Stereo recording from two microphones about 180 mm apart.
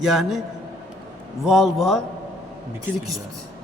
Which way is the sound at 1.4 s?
Centre (ahead or behind).